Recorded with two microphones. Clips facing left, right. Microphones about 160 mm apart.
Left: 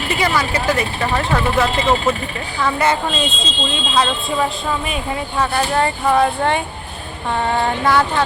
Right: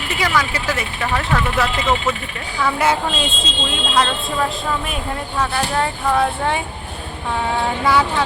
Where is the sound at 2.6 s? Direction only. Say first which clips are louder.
Even; 5° right (ahead or behind).